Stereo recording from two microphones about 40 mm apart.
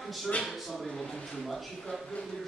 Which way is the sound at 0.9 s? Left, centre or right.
Centre.